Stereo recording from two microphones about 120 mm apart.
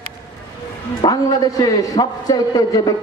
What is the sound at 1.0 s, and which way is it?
A man's voice, 30° left (ahead or behind).